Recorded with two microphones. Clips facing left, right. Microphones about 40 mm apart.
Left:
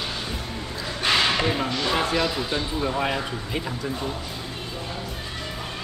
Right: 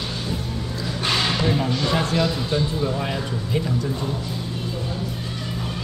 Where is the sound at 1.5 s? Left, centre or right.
Centre.